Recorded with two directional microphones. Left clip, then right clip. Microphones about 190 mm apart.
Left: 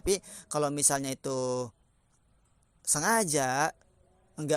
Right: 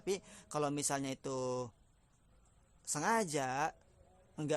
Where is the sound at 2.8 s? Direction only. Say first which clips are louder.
Left 7 dB; 25° left (ahead or behind).